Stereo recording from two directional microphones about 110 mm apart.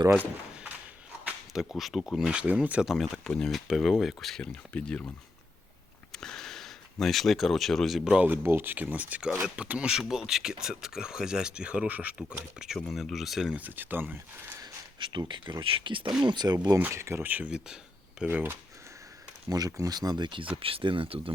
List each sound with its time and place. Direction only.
0.5 s a sound: 10° right (ahead or behind)
1.5 s speech: centre (ahead or behind)
13.6 s speech: 15° right (ahead or behind)
14.6 s a sound: 45° right (ahead or behind)
15.6 s speech: 55° right (ahead or behind)
16.8 s speech: 25° right (ahead or behind)
19.5 s speech: 35° right (ahead or behind)
20.6 s speech: 55° right (ahead or behind)